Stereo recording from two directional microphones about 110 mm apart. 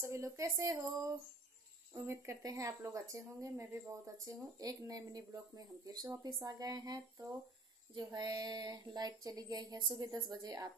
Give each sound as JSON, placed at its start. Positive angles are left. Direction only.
{"t": 0.0, "sound": "speech", "side_deg": -25}